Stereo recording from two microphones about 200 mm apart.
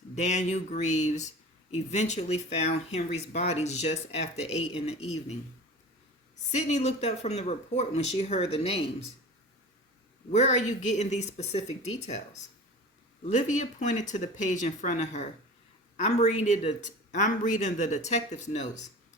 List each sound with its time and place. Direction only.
0.2 s speech: 35° left (ahead or behind)
6.5 s speech: 35° left (ahead or behind)
10.3 s speech: 35° left (ahead or behind)
13.2 s speech: 35° left (ahead or behind)